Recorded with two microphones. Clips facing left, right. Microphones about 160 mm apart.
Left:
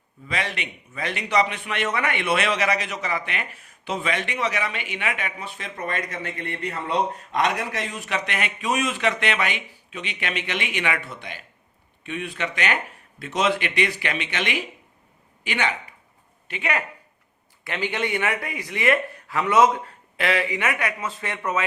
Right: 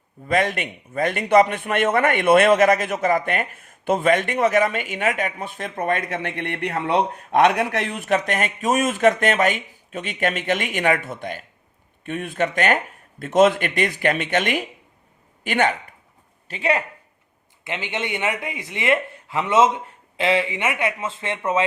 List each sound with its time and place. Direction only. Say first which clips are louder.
0.3 s a man's voice: right 8 dB; 50° right (ahead or behind)
16.5 s a man's voice: right 5 dB; 35° right (ahead or behind)
17.6 s speech: left 1 dB; 20° right (ahead or behind)